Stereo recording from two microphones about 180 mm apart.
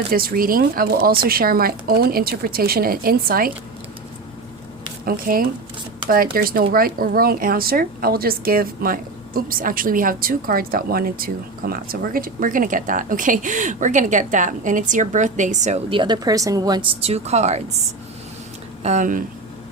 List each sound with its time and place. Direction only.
0.1 s speech: 55° right (ahead or behind)
5.0 s a woman's voice: 50° right (ahead or behind)
18.8 s speech: 40° right (ahead or behind)